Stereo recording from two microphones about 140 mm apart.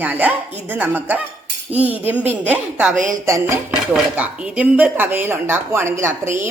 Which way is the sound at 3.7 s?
10° right (ahead or behind).